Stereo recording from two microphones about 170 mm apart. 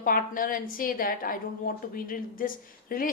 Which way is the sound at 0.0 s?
55° left (ahead or behind).